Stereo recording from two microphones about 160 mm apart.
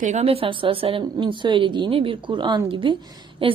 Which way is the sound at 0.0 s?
45° right (ahead or behind).